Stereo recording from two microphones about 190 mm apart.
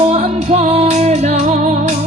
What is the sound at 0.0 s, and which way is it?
Music, 35° right (ahead or behind).